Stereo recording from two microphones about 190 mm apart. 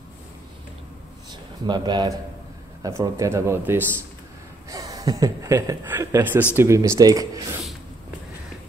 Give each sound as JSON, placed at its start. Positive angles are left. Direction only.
{"t": 1.6, "sound": "speech", "side_deg": -20}